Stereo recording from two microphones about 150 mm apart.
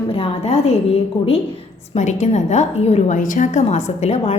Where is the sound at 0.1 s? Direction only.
40° left (ahead or behind).